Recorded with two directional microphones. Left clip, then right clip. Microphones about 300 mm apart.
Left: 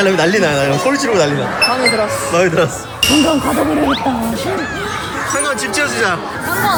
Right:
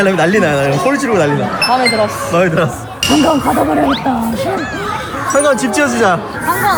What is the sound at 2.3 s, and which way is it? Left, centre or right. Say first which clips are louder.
Speech: even; centre.